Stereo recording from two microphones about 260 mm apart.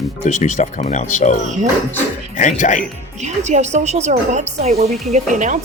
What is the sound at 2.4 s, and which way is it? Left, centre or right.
Speech, left.